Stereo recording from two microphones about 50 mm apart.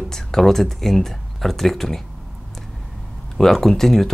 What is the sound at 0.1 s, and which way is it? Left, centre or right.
Speech, centre.